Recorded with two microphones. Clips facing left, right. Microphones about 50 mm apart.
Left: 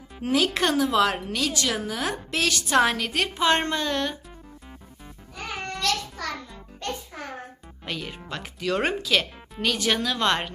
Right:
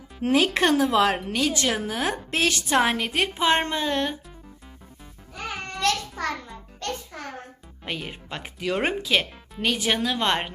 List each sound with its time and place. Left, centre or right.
0.2 s a woman's voice: right
5.8 s a sound: right
6.7 s music: centre
7.9 s a woman's voice: right